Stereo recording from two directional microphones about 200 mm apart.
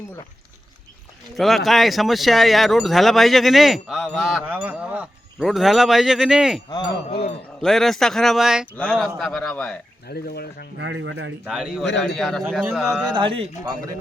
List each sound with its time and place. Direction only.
1.4 s speech: centre (ahead or behind)
6.7 s wind chime: 25° left (ahead or behind)
7.6 s speech: centre (ahead or behind)
10.1 s speech: 50° left (ahead or behind)
10.8 s speech: 65° right (ahead or behind)
11.4 s speech: 5° right (ahead or behind)
13.1 s speech: 25° right (ahead or behind)